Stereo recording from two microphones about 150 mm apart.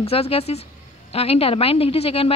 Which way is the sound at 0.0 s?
40° left (ahead or behind).